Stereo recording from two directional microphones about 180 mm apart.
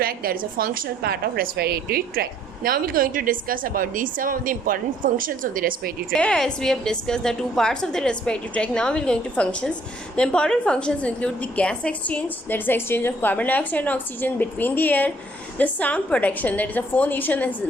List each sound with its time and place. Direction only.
0.0 s a woman's voice: 55° right (ahead or behind)
6.1 s a woman's voice: 5° left (ahead or behind)